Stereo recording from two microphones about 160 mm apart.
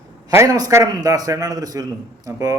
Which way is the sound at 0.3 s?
25° right (ahead or behind).